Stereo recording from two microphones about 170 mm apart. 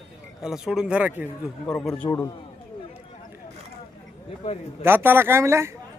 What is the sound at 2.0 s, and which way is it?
Speech, 20° left (ahead or behind).